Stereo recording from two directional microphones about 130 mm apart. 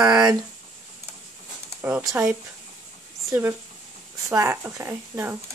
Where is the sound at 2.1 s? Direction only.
25° right (ahead or behind).